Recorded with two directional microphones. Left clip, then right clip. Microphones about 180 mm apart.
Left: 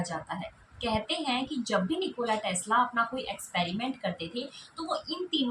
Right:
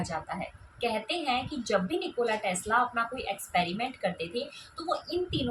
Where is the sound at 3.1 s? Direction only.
20° right (ahead or behind).